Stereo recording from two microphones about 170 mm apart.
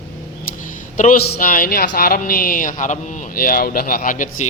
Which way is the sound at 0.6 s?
50° left (ahead or behind).